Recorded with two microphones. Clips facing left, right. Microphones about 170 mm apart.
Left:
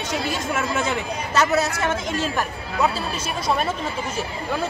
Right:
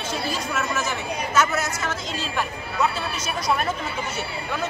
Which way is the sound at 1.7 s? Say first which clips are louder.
Left 5 dB; 55° left (ahead or behind).